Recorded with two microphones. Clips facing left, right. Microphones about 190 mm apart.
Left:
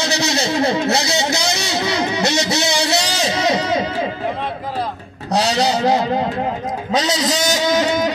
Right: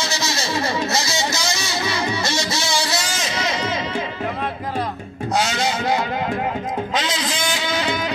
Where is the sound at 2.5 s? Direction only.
20° left (ahead or behind).